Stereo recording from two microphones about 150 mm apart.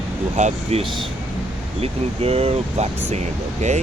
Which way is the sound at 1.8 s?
40° right (ahead or behind).